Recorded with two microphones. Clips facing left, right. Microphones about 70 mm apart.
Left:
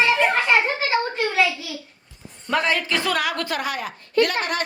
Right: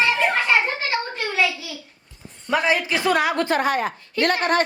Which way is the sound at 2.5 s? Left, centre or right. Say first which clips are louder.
Right 1 dB; centre.